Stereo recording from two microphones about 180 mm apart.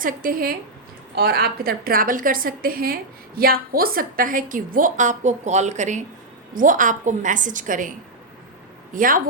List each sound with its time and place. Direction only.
0.0 s a woman's voice: 50° right (ahead or behind)